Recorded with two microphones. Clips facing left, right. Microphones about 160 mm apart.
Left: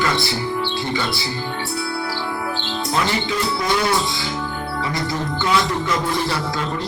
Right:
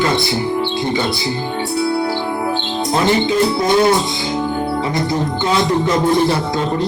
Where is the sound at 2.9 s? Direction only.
25° right (ahead or behind).